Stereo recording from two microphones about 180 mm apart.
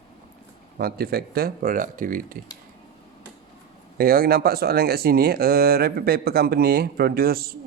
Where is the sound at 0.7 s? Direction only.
55° right (ahead or behind).